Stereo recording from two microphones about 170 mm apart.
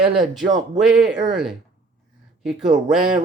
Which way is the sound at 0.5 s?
Centre (ahead or behind).